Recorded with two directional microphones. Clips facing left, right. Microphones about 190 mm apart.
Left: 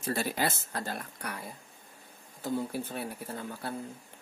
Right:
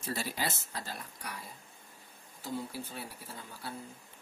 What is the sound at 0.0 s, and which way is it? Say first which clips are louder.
Speech: left 5 dB; 55° left (ahead or behind).